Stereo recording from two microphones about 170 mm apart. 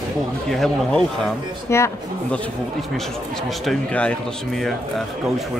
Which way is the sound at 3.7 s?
5° left (ahead or behind).